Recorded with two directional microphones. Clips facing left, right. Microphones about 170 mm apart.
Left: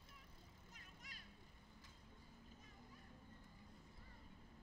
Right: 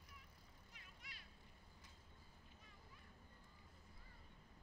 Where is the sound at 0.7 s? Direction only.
45° left (ahead or behind).